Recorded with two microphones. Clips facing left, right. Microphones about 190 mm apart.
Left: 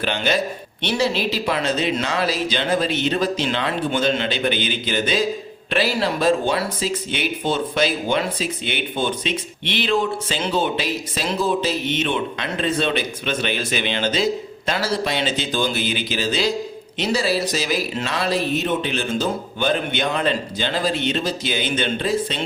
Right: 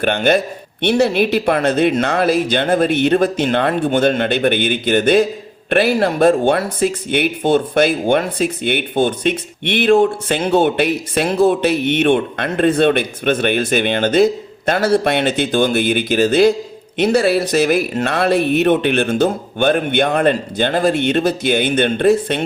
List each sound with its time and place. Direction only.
0.0 s speech: 55° right (ahead or behind)